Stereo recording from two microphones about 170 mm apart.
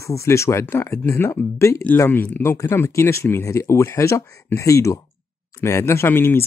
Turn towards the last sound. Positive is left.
turn(degrees=15)  # may be behind; listen again after turning